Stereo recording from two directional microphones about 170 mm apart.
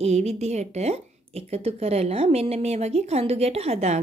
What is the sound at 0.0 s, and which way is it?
Speech, 40° right (ahead or behind).